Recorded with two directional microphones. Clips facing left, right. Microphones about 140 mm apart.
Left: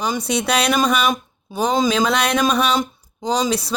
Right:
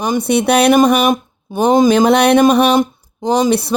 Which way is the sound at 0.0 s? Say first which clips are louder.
Right 7 dB; 55° right (ahead or behind).